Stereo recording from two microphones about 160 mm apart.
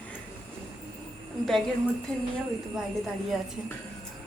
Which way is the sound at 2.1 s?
5° left (ahead or behind).